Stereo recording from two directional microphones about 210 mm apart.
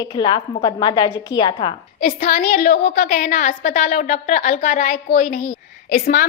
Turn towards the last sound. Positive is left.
turn(degrees=45)  # may be behind; listen again after turning